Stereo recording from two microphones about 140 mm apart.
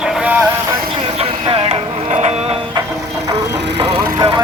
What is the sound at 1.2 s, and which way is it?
Vehicle, 40° right (ahead or behind).